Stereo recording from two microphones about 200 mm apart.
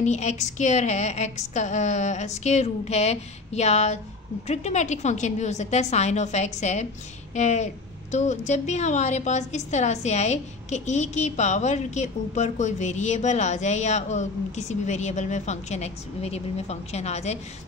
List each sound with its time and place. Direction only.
0.0 s a woman's voice: 35° left (ahead or behind)